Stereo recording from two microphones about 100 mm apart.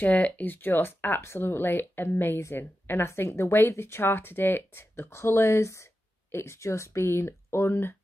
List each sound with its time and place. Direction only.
0.0 s speech: 15° left (ahead or behind)